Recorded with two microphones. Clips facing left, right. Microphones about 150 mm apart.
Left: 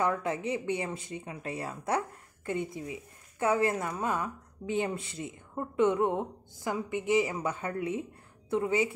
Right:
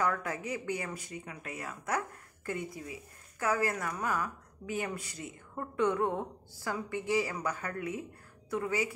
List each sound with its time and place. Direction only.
0.0 s speech: 25° left (ahead or behind)